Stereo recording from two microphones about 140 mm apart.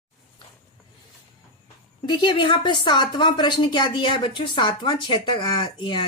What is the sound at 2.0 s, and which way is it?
A woman's voice, 35° left (ahead or behind).